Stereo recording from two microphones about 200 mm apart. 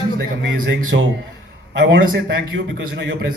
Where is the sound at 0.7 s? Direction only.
65° right (ahead or behind).